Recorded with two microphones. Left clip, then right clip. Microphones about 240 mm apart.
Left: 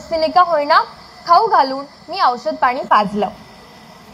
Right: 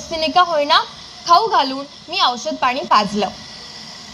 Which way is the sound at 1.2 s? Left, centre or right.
Right.